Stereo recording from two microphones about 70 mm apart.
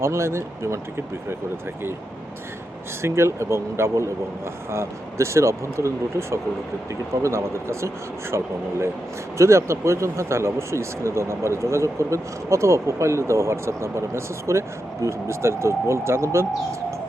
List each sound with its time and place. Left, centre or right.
0.0 s speech: right
3.0 s speech: right
9.4 s speech: right